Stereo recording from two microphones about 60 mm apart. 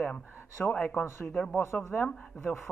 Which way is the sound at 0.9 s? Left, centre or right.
Left.